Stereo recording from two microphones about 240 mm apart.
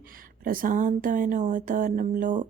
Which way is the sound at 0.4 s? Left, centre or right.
Right.